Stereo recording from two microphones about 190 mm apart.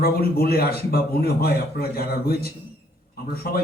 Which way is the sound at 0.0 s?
55° left (ahead or behind).